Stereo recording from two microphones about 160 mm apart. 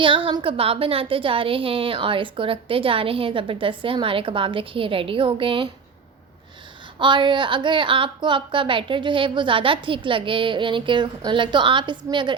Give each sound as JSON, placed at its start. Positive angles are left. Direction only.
{"t": 0.3, "sound": "a woman's voice", "side_deg": -30}
{"t": 7.0, "sound": "a woman's voice", "side_deg": -30}